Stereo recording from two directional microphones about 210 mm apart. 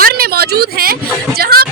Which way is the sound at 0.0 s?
45° right (ahead or behind).